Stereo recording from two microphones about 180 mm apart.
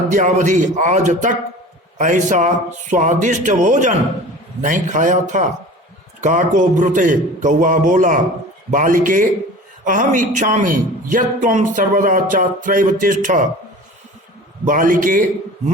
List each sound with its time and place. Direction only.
0.1 s a man's voice: 45° right (ahead or behind)
14.6 s a man's voice: 50° right (ahead or behind)